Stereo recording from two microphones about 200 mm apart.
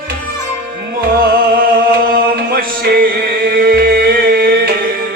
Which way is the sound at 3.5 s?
50° right (ahead or behind).